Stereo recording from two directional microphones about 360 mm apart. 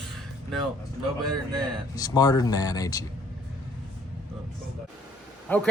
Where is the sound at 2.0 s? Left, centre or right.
Centre.